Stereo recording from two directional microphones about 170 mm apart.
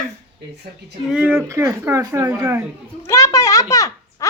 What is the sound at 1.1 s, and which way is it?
Speech, 10° right (ahead or behind).